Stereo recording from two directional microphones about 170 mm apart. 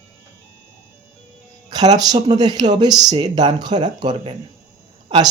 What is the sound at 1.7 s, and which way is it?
Speech, 25° right (ahead or behind).